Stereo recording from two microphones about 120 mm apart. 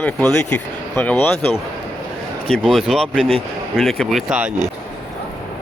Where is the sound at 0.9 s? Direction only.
20° left (ahead or behind).